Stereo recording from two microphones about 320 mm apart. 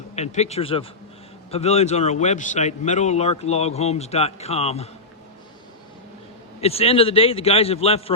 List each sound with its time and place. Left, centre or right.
0.2 s a man's voice: left
6.6 s a man's voice: centre